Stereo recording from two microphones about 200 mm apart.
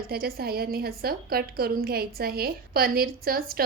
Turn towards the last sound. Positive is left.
turn(degrees=-50)  # may be behind; listen again after turning